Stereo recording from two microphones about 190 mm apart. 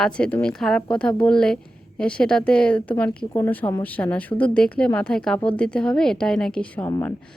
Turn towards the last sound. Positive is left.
turn(degrees=15)  # may be behind; listen again after turning